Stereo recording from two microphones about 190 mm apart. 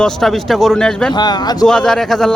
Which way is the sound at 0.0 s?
Centre (ahead or behind).